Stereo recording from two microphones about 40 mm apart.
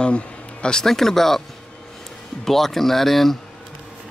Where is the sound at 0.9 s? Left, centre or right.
Centre.